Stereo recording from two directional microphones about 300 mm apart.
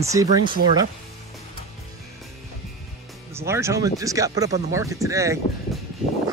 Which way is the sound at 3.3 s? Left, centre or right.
Centre.